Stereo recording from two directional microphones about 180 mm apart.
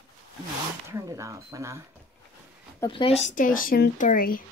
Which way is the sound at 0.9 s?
15° right (ahead or behind).